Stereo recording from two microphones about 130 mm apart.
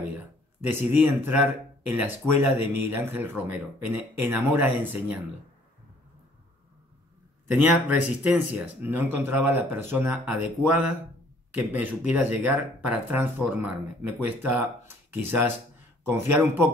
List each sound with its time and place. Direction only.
0.2 s a sound: 15° right (ahead or behind)
0.9 s speech: 15° right (ahead or behind)
7.5 s speech: 10° right (ahead or behind)